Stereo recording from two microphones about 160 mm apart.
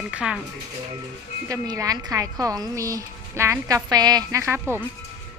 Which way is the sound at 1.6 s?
20° right (ahead or behind).